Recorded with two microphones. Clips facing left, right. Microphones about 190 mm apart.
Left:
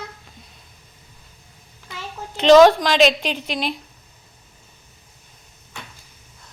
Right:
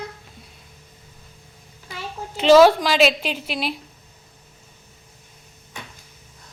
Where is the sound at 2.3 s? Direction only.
5° right (ahead or behind).